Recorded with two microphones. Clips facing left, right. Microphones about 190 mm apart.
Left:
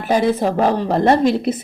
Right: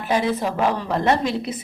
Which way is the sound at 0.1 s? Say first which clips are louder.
Left 5 dB; 40° left (ahead or behind).